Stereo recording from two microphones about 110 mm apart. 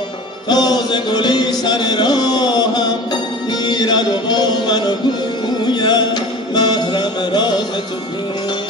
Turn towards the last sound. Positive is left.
turn(degrees=40)  # may be behind; listen again after turning